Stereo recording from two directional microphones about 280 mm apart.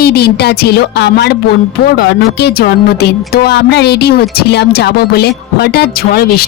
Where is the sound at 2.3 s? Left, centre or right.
Left.